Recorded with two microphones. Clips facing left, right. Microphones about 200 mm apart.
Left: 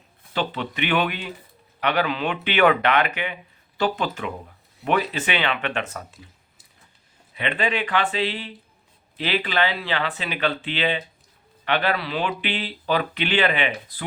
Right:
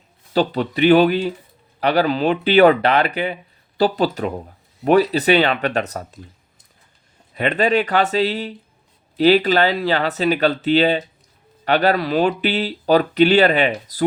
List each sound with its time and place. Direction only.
0.3 s speech: 40° right (ahead or behind)
7.3 s speech: 40° right (ahead or behind)